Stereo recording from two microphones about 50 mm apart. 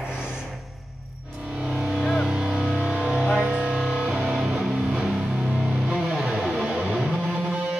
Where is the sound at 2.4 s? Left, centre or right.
Right.